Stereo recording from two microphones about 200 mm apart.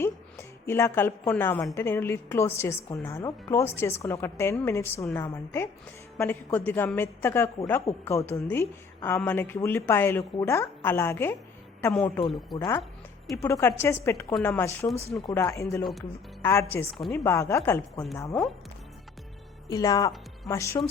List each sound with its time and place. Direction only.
0.0 s a woman's voice: 15° left (ahead or behind)
15.8 s speech: centre (ahead or behind)
16.4 s a woman's voice: 10° left (ahead or behind)
19.7 s a woman's voice: 15° left (ahead or behind)